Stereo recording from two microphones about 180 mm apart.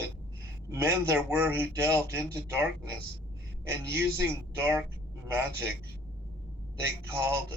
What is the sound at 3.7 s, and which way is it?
Speech, 15° right (ahead or behind).